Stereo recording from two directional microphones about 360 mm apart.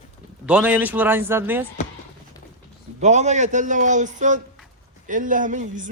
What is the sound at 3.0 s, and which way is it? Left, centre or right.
Speech, centre.